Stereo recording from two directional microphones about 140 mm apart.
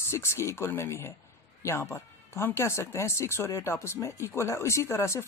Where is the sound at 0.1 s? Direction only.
20° left (ahead or behind).